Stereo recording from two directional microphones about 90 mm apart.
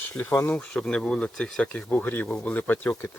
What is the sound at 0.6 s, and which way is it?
Speech, 10° left (ahead or behind).